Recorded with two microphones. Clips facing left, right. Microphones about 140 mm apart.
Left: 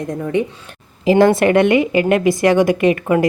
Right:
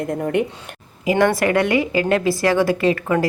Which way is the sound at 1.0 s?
25° left (ahead or behind).